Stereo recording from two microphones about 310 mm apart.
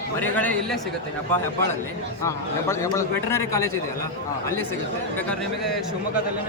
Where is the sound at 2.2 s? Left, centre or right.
Centre.